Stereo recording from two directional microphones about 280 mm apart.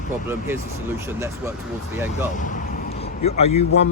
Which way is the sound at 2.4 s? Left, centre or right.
Left.